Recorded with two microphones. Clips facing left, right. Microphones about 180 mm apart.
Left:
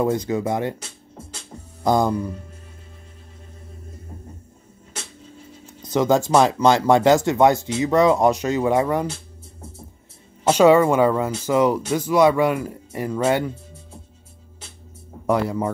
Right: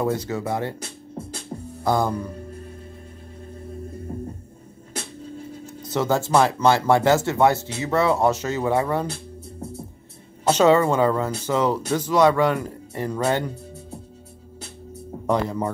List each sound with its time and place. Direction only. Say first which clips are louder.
0.0 s speech: left 3 dB; 20° left (ahead or behind)
1.8 s music: left 3 dB; 20° left (ahead or behind)
5.8 s speech: left 4 dB; 15° left (ahead or behind)
10.5 s speech: left 3 dB; 10° left (ahead or behind)
15.2 s speech: left 2 dB; 10° left (ahead or behind)